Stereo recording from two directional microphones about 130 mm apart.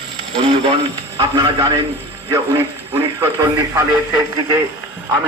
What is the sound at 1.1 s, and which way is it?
Speech, 35° right (ahead or behind).